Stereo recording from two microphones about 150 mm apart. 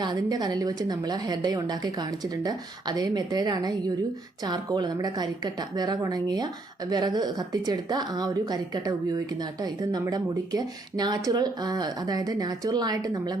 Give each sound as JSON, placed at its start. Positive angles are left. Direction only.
{"t": 0.0, "sound": "a woman's voice", "side_deg": -25}